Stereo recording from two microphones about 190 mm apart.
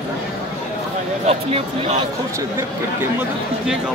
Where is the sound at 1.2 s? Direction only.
35° right (ahead or behind).